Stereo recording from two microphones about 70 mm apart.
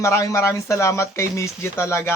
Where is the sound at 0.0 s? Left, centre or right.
Left.